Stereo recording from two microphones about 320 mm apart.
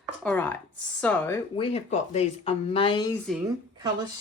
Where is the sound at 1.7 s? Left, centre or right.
Left.